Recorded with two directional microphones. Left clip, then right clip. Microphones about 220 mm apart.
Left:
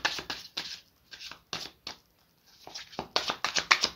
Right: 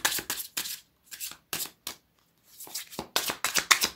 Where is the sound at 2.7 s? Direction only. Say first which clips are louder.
Even; 20° right (ahead or behind).